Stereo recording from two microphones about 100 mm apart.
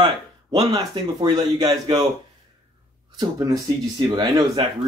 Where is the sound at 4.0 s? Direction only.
45° right (ahead or behind).